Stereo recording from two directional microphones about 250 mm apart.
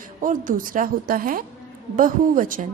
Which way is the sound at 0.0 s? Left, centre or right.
Right.